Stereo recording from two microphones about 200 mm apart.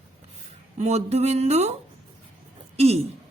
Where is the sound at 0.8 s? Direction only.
35° right (ahead or behind).